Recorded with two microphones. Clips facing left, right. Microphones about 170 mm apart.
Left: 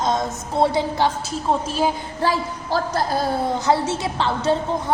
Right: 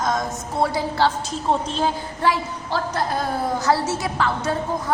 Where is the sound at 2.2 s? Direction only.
35° left (ahead or behind).